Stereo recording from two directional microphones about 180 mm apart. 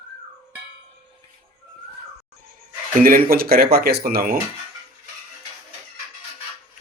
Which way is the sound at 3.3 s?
55° right (ahead or behind).